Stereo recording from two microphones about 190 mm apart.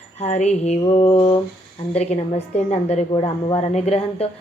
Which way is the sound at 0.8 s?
30° left (ahead or behind).